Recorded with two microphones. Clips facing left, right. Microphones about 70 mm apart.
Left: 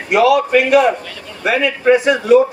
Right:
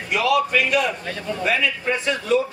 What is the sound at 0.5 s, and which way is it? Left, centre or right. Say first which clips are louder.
Speech: left 9 dB; left.